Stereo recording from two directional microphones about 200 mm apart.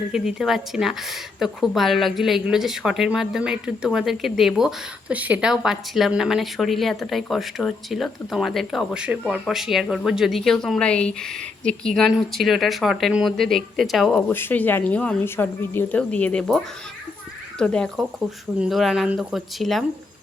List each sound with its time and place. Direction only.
0.1 s speech: centre (ahead or behind)